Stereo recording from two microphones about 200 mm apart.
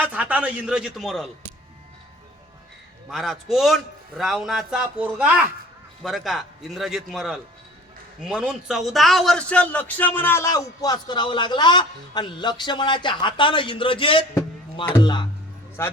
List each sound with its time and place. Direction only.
0.0 s a man's voice: 5° right (ahead or behind)
3.1 s a man's voice: centre (ahead or behind)